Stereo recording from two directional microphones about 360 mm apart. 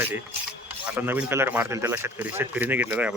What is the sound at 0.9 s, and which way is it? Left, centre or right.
Speech, centre.